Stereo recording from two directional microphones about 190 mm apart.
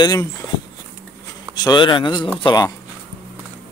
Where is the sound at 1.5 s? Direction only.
20° left (ahead or behind).